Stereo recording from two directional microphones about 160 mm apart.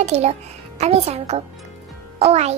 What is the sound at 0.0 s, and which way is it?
A child's voice, 45° right (ahead or behind).